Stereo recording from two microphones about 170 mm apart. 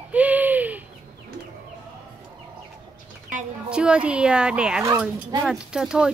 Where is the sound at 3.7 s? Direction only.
5° right (ahead or behind).